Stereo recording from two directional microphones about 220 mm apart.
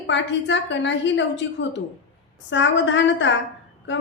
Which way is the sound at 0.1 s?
55° left (ahead or behind).